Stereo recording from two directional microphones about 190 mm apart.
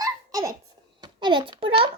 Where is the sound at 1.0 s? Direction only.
25° right (ahead or behind).